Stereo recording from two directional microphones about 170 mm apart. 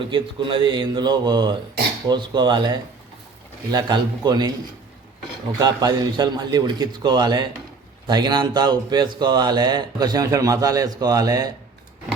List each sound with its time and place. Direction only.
0.1 s speech: 30° right (ahead or behind)
5.5 s speech: 25° right (ahead or behind)